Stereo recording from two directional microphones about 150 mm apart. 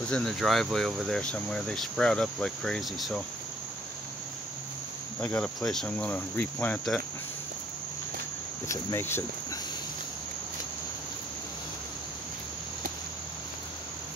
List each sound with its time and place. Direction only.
0.1 s speech: 5° left (ahead or behind)
5.2 s speech: 5° left (ahead or behind)
8.6 s speech: 15° left (ahead or behind)